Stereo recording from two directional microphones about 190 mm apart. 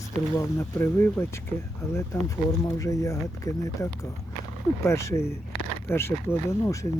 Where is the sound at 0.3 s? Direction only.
15° left (ahead or behind).